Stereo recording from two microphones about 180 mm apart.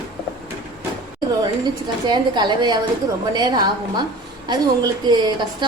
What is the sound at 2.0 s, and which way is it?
A woman's voice, 25° right (ahead or behind).